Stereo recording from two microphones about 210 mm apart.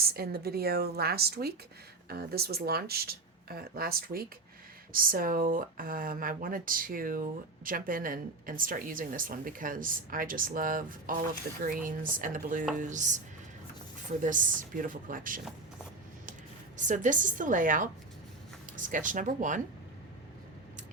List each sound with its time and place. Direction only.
0.0 s a woman's voice: 45° right (ahead or behind)
16.7 s a woman's voice: 35° right (ahead or behind)